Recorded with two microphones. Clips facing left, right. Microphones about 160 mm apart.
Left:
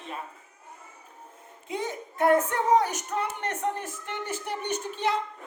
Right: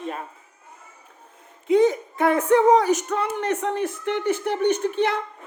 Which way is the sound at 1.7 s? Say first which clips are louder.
Right 15 dB; 90° right.